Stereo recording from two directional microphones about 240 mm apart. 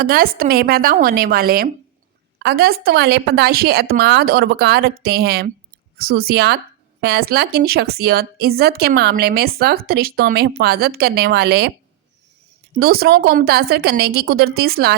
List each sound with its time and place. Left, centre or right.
0.0 s speech: right
12.7 s speech: right